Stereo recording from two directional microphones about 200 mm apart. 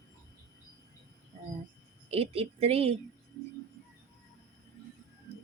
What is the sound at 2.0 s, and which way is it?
Speech, 30° right (ahead or behind).